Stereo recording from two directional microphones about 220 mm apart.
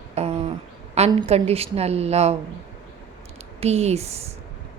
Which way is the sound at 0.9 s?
30° right (ahead or behind).